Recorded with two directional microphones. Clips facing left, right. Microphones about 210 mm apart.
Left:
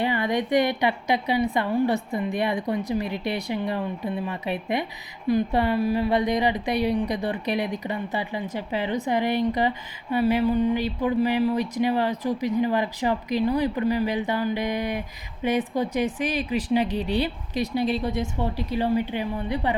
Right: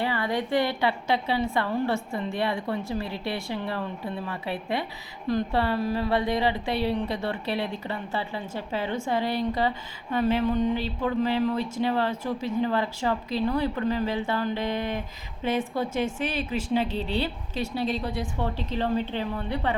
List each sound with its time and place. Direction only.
0.0 s speech: 20° left (ahead or behind)